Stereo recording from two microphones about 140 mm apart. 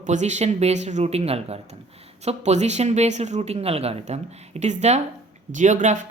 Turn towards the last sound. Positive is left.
turn(degrees=-60)  # may be behind; listen again after turning